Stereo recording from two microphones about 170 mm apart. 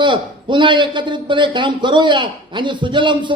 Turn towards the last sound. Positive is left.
turn(degrees=-30)  # may be behind; listen again after turning